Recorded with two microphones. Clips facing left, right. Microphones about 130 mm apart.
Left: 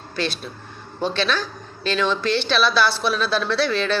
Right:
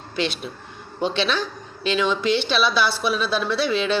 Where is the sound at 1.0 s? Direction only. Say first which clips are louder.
Even; 20° right (ahead or behind).